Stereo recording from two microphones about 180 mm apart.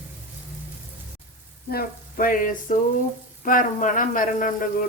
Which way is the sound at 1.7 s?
50° left (ahead or behind).